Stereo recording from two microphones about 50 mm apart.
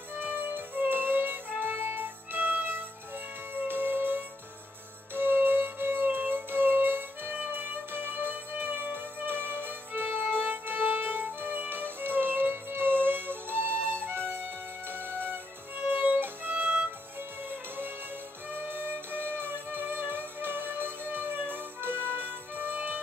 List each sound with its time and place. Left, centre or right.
0.1 s music: right
14.9 s music: right
18.5 s music: right